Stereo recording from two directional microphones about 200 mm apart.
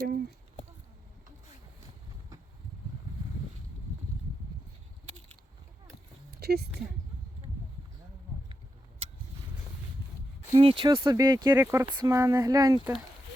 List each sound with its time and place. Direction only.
0.0 s speech: 50° right (ahead or behind)
6.4 s speech: 50° right (ahead or behind)
10.6 s speech: 25° right (ahead or behind)